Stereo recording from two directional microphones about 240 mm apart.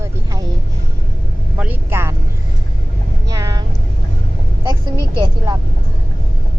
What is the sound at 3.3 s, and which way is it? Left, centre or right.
Vehicle, centre.